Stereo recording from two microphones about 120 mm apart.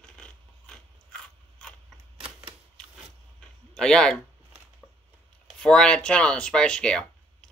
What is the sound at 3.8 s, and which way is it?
Speech, 5° left (ahead or behind).